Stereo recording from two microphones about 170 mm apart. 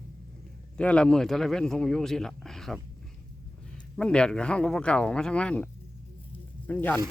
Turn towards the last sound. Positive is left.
turn(degrees=10)  # may be behind; listen again after turning